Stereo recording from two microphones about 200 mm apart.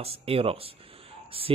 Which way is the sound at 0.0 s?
30° right (ahead or behind).